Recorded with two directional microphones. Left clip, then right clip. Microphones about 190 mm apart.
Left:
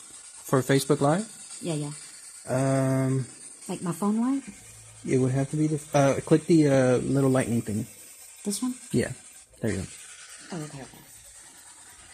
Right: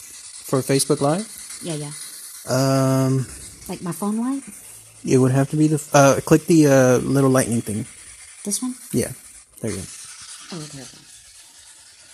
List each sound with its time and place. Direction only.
0.7 s speech: 15° right (ahead or behind)
9.6 s speech: 5° right (ahead or behind)